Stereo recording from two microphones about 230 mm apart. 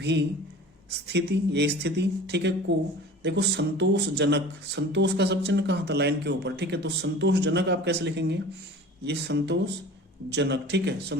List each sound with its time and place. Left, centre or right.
0.0 s speech: right